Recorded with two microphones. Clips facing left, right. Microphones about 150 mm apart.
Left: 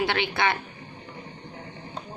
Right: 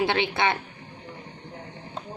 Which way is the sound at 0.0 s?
25° right (ahead or behind).